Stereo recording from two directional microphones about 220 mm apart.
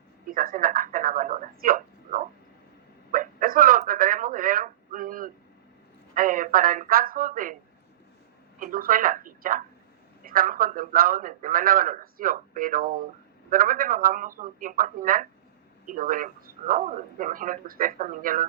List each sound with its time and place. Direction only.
0.3 s speech: 40° right (ahead or behind)
3.1 s telephone: 40° right (ahead or behind)
6.1 s speech: 40° right (ahead or behind)
8.5 s a sound: 40° right (ahead or behind)
10.2 s a man's voice: 40° right (ahead or behind)